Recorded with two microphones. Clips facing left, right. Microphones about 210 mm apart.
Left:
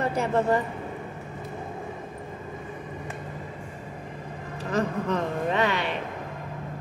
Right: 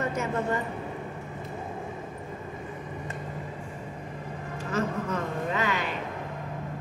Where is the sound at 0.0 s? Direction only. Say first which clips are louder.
Left 4 dB; 35° left (ahead or behind).